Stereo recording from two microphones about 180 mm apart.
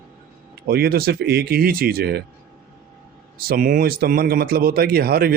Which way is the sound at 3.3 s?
55° right (ahead or behind).